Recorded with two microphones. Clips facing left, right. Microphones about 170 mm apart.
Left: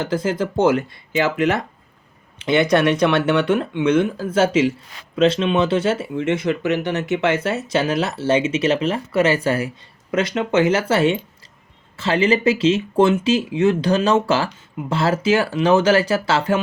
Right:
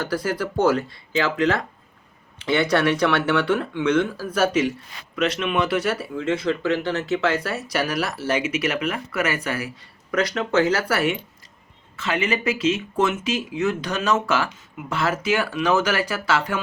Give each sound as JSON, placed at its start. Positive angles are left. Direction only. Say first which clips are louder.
{"t": 0.0, "sound": "speech", "louder": "left 4 dB", "side_deg": 20}